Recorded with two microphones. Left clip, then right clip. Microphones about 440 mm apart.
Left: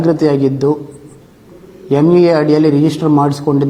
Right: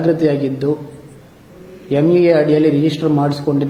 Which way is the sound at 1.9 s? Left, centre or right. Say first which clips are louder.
Left 2 dB; left.